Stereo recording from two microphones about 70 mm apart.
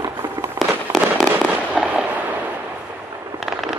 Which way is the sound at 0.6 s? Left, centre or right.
Centre.